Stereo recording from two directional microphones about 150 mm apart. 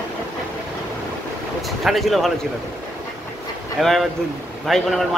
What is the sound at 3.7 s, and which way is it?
Speech, centre (ahead or behind).